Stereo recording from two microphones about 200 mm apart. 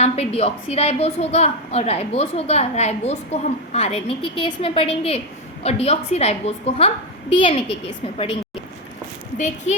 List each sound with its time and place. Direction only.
0.0 s a woman's voice: 30° left (ahead or behind)
9.7 s a woman's voice: 35° left (ahead or behind)